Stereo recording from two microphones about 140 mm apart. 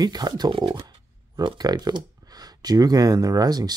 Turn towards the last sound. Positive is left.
turn(degrees=-30)  # may be behind; listen again after turning